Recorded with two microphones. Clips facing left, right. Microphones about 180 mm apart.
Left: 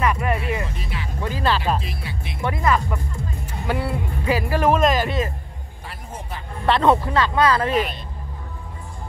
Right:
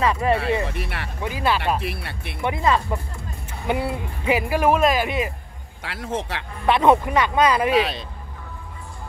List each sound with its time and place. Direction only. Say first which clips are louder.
0.0 s speech: right 2 dB; 30° right (ahead or behind)
0.7 s speech: right 2 dB; 70° right (ahead or behind)
1.2 s speech: even; 10° right (ahead or behind)
1.8 s speech: right 2 dB; 65° right (ahead or behind)
2.4 s speech: even; 20° right (ahead or behind)
5.8 s a man's voice: right 9 dB; 90° right
6.6 s speech: right 1 dB; 10° right (ahead or behind)
7.7 s a man's voice: right 2 dB; 90° right